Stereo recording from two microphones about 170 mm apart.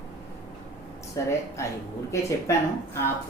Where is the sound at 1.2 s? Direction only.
20° left (ahead or behind).